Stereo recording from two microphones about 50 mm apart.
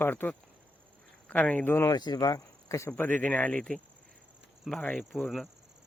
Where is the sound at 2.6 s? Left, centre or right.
Left.